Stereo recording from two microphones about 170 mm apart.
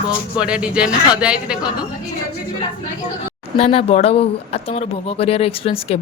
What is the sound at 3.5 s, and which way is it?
A man's voice, 35° left (ahead or behind).